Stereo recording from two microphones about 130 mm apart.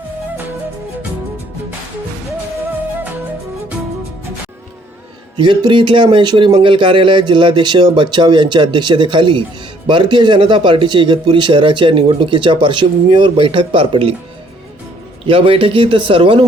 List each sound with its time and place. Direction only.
5.4 s speech: 40° right (ahead or behind)
15.3 s speech: 45° right (ahead or behind)